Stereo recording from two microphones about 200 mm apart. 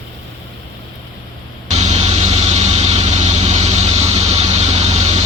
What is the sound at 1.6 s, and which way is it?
Vehicle, 35° right (ahead or behind).